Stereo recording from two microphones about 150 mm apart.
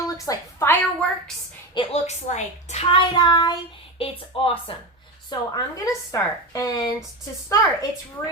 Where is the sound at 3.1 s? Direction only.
30° left (ahead or behind).